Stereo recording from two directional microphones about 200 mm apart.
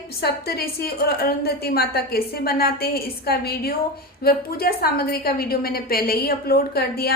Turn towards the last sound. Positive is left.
turn(degrees=50)  # may be behind; listen again after turning